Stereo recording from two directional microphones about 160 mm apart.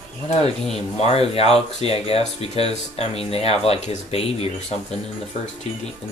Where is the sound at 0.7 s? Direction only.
40° left (ahead or behind).